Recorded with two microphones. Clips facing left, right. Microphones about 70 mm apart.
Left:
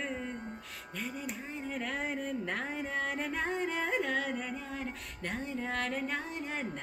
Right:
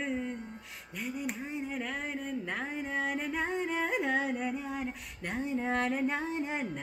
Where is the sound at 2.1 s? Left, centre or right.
Centre.